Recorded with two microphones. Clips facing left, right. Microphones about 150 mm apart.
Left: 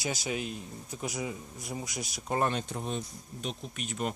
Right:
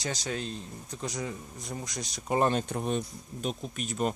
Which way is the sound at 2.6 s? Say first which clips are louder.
Right 5 dB; 60° right (ahead or behind).